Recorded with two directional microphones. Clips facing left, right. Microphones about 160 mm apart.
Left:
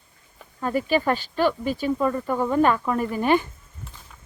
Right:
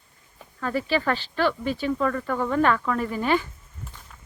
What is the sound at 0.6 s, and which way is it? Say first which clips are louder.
Speech: left 2 dB; 15° left (ahead or behind).